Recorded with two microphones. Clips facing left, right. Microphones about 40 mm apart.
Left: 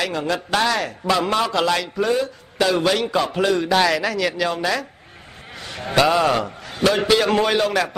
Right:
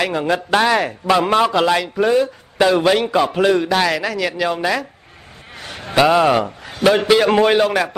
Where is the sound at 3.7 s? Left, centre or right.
Centre.